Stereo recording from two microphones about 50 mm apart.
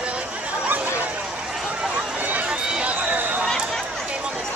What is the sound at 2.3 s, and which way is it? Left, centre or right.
Run, right.